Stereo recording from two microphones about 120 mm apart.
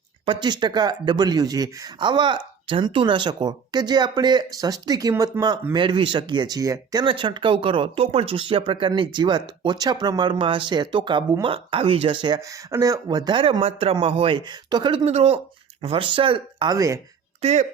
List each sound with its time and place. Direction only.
0.3 s speech: 40° right (ahead or behind)
7.0 s speech: 45° right (ahead or behind)
15.0 s speech: 60° right (ahead or behind)
16.6 s speech: 30° right (ahead or behind)
17.4 s speech: 75° right (ahead or behind)